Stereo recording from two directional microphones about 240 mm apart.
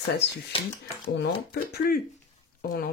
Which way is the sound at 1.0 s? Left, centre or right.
Left.